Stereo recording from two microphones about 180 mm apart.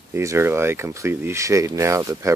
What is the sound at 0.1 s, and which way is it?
Speech, 15° right (ahead or behind).